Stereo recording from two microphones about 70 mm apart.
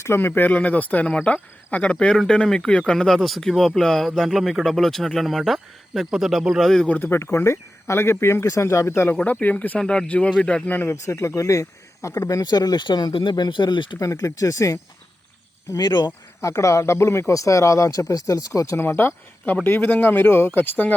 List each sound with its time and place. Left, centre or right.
0.0 s speech: left; by 6.7 s centre
7.0 s speech: left
9.1 s speech: left
9.8 s speech: centre
10.7 s speech: left
11.0 s speech: left
12.2 s speech: left
14.0 s speech: left
15.7 s speech: left
16.4 s speech: left
18.8 s speech: left